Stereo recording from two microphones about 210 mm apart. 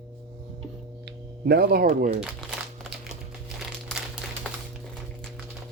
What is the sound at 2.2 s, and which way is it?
Crumpling, centre (ahead or behind).